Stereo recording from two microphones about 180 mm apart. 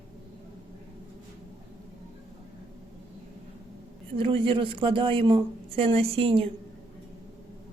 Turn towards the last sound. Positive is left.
turn(degrees=-30)  # may be behind; listen again after turning